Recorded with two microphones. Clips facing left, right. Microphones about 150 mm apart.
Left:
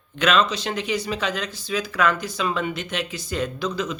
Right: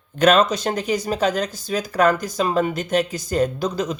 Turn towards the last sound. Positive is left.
turn(degrees=-40)  # may be behind; listen again after turning